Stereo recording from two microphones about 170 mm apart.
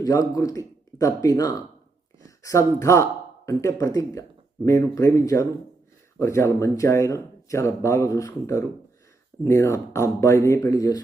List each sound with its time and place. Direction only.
0.0 s speech: 20° left (ahead or behind)